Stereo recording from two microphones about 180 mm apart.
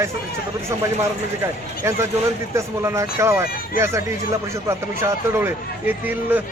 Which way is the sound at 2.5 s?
15° right (ahead or behind).